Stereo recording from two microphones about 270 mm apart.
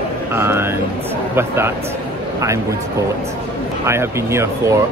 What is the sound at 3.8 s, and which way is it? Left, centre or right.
Speech, centre.